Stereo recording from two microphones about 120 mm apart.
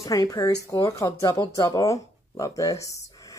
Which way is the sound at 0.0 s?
30° left (ahead or behind).